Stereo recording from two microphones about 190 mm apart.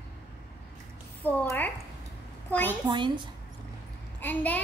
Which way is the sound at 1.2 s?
10° left (ahead or behind).